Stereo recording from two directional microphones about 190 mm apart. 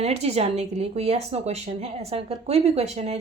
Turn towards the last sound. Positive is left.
turn(degrees=-35)  # may be behind; listen again after turning